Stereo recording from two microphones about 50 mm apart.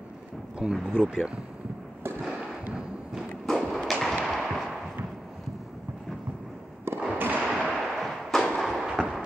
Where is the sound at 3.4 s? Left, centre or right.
Centre.